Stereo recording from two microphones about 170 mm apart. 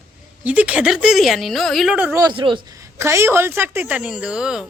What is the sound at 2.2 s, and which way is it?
Speech, 30° right (ahead or behind).